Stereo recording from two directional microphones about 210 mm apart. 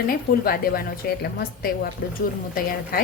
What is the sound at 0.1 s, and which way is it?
A woman's voice, 45° left (ahead or behind).